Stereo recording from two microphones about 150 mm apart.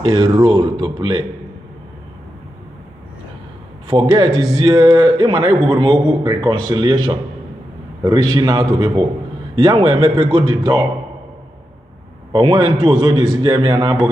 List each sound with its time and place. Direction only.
0.0 s a man's voice: 35° right (ahead or behind)
4.4 s a man's voice: 35° right (ahead or behind)
10.5 s a man's voice: 25° right (ahead or behind)
12.3 s a man's voice: 35° right (ahead or behind)